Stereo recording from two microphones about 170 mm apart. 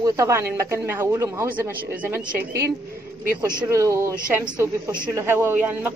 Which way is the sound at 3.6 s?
20° right (ahead or behind).